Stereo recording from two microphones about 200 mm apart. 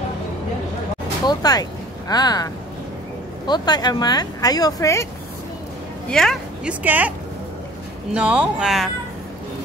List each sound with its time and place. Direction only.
1.2 s speech: 20° left (ahead or behind)
6.0 s speech: centre (ahead or behind)
8.1 s speech: 5° right (ahead or behind)